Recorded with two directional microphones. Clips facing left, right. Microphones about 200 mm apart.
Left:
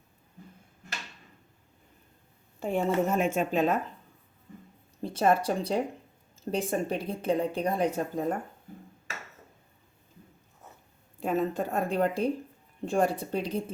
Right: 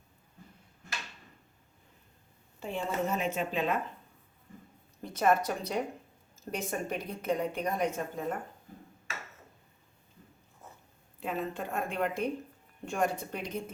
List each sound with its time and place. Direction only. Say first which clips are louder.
2.6 s speech: left 7 dB; 50° left (ahead or behind)
5.0 s speech: left 3 dB; 30° left (ahead or behind)
11.2 s speech: left 7 dB; 45° left (ahead or behind)